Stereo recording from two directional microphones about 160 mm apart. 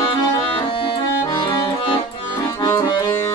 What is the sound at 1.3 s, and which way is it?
Accordion, 25° left (ahead or behind).